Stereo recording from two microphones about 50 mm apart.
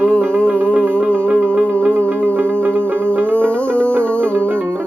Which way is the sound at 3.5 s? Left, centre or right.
Left.